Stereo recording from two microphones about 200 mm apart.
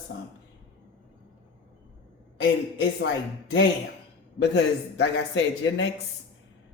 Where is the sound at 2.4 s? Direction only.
65° left (ahead or behind).